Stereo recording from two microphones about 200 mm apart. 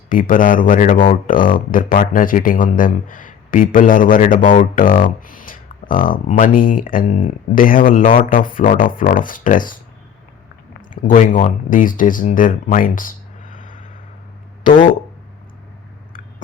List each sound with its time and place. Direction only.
0.1 s speech: 40° left (ahead or behind)
10.9 s speech: 40° left (ahead or behind)